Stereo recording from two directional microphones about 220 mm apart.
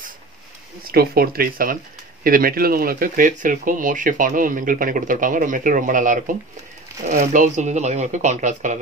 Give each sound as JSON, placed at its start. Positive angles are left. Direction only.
{"t": 0.9, "sound": "speech", "side_deg": -45}